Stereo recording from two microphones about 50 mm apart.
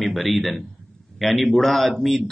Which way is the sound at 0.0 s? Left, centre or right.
Centre.